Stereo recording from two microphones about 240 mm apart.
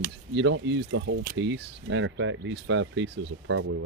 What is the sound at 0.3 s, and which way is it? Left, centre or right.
Speech, right.